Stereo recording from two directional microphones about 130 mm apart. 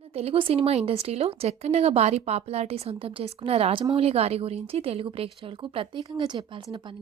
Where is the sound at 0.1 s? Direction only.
50° right (ahead or behind).